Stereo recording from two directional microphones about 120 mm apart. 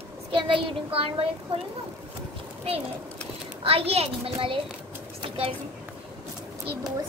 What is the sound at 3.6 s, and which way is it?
Speech, 55° right (ahead or behind).